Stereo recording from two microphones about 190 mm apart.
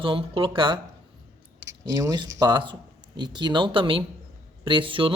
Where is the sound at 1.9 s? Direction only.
15° right (ahead or behind).